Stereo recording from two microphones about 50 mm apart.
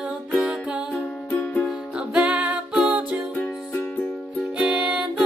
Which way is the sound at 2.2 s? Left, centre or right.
Right.